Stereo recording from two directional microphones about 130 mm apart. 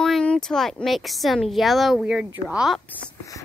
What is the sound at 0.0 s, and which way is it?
Speech, 5° left (ahead or behind).